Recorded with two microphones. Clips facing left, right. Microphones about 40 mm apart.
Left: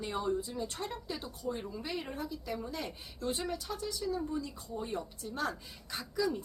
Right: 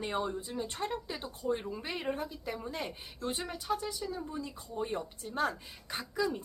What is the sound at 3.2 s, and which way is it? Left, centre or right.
Speech, centre.